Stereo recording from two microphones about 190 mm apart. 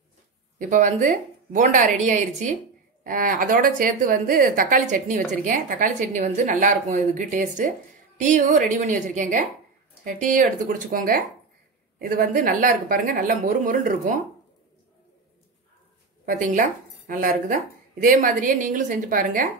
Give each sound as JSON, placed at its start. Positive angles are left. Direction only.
{"t": 0.6, "sound": "a woman's voice", "side_deg": -45}
{"t": 16.3, "sound": "a woman's voice", "side_deg": -45}